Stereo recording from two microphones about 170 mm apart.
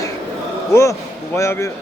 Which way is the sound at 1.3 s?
15° left (ahead or behind).